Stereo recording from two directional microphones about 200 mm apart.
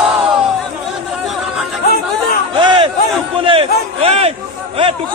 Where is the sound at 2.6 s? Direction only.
25° right (ahead or behind).